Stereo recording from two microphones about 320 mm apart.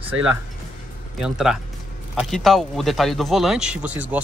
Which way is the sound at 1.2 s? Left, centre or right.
Centre.